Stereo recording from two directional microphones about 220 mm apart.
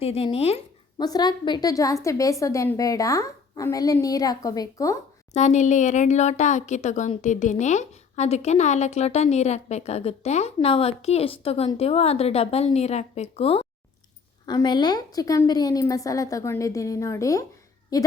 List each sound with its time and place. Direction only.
0.0 s a woman's voice: 25° left (ahead or behind)
5.3 s a woman's voice: 30° left (ahead or behind); by 17.4 s 15° left (ahead or behind)